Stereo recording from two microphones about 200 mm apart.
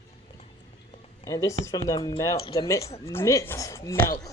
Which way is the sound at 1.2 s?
15° left (ahead or behind).